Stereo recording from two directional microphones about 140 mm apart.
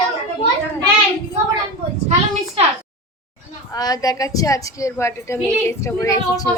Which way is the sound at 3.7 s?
25° left (ahead or behind).